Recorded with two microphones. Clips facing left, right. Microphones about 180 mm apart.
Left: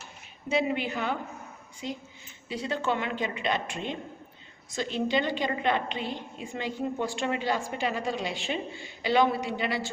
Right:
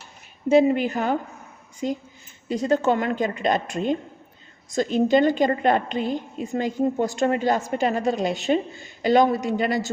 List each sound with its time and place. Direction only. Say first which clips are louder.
0.5 s a woman's voice: right 10 dB; 45° right (ahead or behind)